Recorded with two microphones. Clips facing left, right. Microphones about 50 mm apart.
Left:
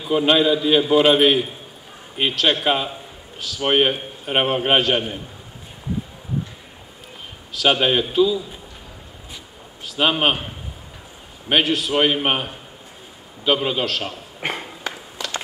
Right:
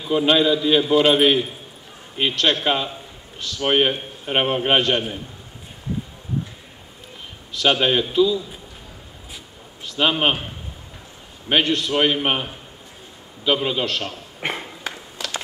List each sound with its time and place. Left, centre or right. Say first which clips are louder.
0.0 s a man's voice: left 1 dB; centre
7.6 s a man's voice: left 1 dB; centre
9.9 s a man's voice: left 1 dB; centre